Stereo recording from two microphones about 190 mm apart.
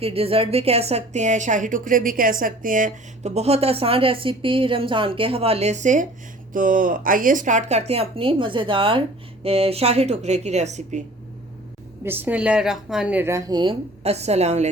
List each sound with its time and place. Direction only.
0.0 s a woman's voice: 30° right (ahead or behind)
12.0 s speech: 10° right (ahead or behind); by 14.7 s 35° right (ahead or behind)